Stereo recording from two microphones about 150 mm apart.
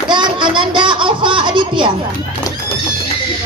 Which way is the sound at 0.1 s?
30° right (ahead or behind).